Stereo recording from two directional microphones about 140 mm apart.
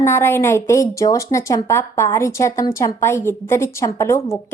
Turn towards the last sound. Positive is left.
turn(degrees=20)  # may be behind; listen again after turning